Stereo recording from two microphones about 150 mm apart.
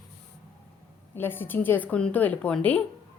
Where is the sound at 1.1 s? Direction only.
15° left (ahead or behind).